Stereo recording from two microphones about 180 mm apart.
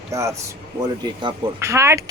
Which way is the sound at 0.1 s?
15° right (ahead or behind).